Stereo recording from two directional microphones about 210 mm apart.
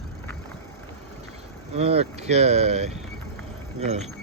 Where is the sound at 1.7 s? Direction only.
30° right (ahead or behind).